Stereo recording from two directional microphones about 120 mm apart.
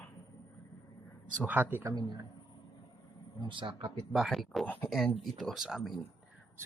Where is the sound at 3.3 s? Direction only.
40° right (ahead or behind).